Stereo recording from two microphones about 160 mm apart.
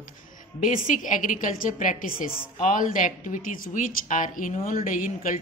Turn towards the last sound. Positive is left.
turn(degrees=55)  # may be behind; listen again after turning